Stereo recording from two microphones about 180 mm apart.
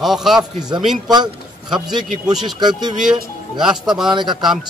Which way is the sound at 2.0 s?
Centre (ahead or behind).